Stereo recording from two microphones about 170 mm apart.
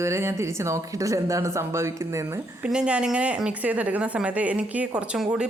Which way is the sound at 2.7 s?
5° right (ahead or behind).